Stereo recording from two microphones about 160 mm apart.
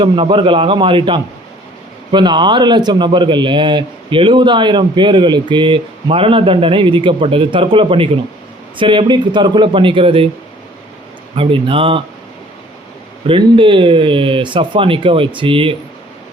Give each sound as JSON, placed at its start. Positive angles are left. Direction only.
{"t": 0.0, "sound": "a man's voice", "side_deg": -30}
{"t": 11.3, "sound": "a man's voice", "side_deg": -35}
{"t": 13.2, "sound": "a man's voice", "side_deg": -30}